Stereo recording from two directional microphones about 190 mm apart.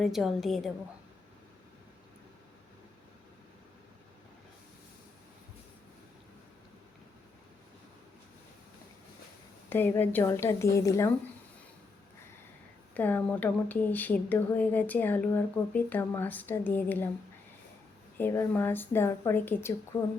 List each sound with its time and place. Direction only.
0.0 s a woman's voice: centre (ahead or behind)
9.6 s speech: 10° left (ahead or behind)
12.9 s speech: 10° left (ahead or behind)
18.2 s speech: 10° left (ahead or behind)